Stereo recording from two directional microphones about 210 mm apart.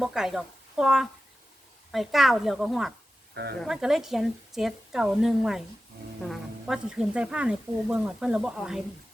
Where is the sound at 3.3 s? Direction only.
50° right (ahead or behind).